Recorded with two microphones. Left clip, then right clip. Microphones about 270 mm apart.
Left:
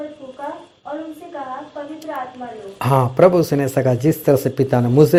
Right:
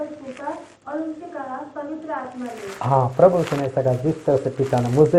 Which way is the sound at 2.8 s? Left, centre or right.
Left.